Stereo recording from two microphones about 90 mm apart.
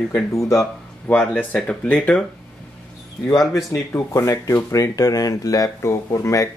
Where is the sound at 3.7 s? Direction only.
35° left (ahead or behind).